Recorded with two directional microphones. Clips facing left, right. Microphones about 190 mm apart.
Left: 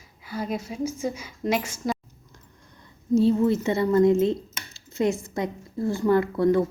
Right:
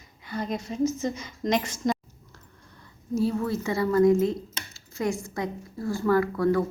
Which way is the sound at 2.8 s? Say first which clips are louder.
Left 6 dB; 25° left (ahead or behind).